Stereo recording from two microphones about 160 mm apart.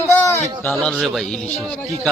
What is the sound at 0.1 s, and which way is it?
A man's voice, 15° left (ahead or behind).